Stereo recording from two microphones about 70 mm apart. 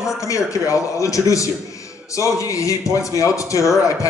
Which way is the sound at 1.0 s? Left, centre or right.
Left.